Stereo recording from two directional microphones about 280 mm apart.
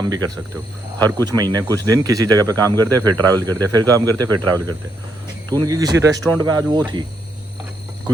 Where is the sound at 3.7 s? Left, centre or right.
Centre.